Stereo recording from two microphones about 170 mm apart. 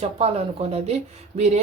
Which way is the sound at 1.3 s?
40° right (ahead or behind).